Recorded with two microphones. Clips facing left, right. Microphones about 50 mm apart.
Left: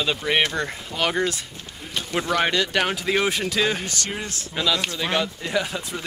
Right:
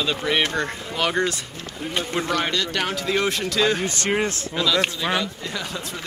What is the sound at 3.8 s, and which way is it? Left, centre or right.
Speech, right.